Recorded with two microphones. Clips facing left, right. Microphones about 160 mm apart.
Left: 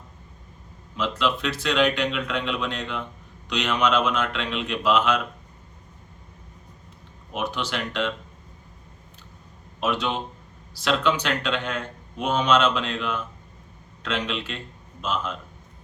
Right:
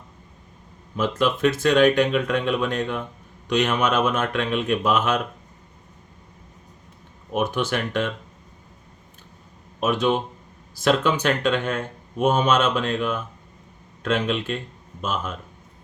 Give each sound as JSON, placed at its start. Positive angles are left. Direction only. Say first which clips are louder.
{"t": 0.9, "sound": "speech", "louder": "right 3 dB", "side_deg": -45}
{"t": 7.3, "sound": "speech", "louder": "right 5 dB", "side_deg": -50}
{"t": 9.8, "sound": "speech", "louder": "right 5 dB", "side_deg": -50}